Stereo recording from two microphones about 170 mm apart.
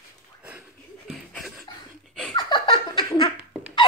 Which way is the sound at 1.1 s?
Centre (ahead or behind).